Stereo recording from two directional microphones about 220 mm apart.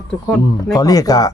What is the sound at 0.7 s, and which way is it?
Speech, 15° left (ahead or behind).